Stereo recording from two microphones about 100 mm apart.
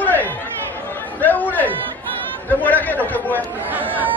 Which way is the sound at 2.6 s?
15° left (ahead or behind).